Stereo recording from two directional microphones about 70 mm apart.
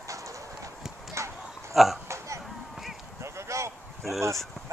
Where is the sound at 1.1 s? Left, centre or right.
Right.